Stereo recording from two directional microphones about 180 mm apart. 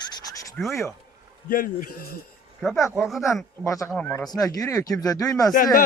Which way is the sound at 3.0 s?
Centre (ahead or behind).